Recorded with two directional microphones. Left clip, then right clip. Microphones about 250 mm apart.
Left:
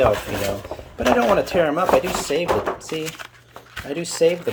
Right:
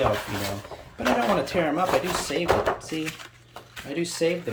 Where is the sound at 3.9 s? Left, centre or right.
Centre.